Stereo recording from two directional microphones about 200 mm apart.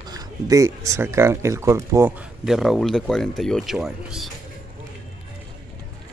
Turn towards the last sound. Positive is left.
turn(degrees=0)  # may be behind; listen again after turning